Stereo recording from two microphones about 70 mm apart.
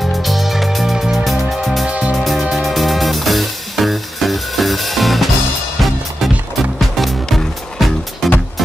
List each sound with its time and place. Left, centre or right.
0.2 s music: centre
1.9 s music: centre
2.1 s music: centre
6.6 s music: centre